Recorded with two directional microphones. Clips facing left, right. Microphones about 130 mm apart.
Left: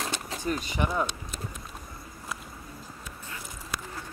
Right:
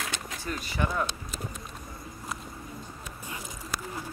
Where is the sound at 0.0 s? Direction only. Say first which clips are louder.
Left 4 dB; 30° left (ahead or behind).